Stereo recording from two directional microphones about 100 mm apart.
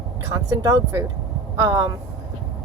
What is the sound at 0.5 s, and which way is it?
Speech, 40° right (ahead or behind).